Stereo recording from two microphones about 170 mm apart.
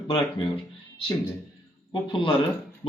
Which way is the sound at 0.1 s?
30° left (ahead or behind).